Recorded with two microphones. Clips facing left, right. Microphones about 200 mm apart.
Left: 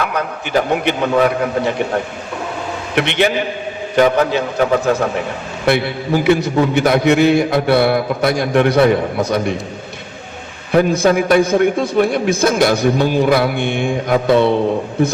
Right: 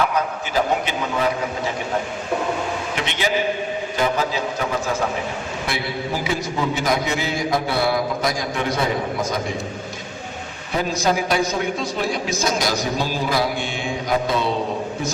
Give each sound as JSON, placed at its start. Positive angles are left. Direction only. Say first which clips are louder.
{"t": 0.0, "sound": "a man's voice", "louder": "left 1 dB", "side_deg": 60}
{"t": 2.9, "sound": "a man's voice", "louder": "left 10 dB", "side_deg": 65}
{"t": 10.7, "sound": "a man's voice", "louder": "left 8 dB", "side_deg": 55}